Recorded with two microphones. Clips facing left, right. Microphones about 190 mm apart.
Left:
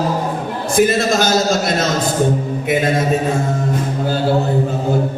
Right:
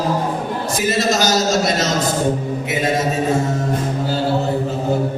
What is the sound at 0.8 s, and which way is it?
Speech, 55° left (ahead or behind).